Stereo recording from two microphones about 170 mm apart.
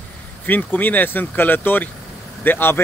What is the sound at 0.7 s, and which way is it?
Speech, 10° left (ahead or behind).